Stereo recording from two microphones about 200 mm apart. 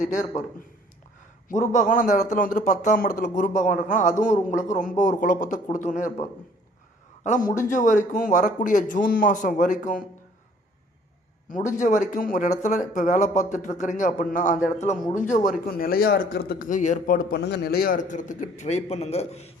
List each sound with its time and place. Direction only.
0.0 s a man's voice: 40° left (ahead or behind)
1.5 s a man's voice: 40° left (ahead or behind)
7.3 s a man's voice: 40° left (ahead or behind)
11.5 s a man's voice: 40° left (ahead or behind)